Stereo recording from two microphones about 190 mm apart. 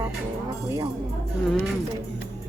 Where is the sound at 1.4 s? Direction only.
Centre (ahead or behind).